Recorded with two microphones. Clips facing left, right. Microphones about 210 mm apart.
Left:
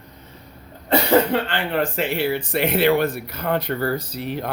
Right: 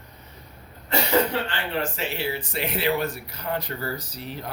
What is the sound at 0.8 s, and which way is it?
Speech, 55° left (ahead or behind).